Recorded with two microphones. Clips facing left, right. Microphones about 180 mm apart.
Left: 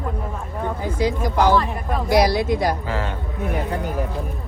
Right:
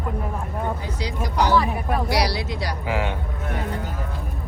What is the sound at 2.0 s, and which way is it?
Speech, 50° left (ahead or behind).